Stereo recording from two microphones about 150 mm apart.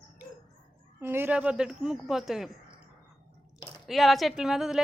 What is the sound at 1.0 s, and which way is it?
A woman's voice, 15° right (ahead or behind).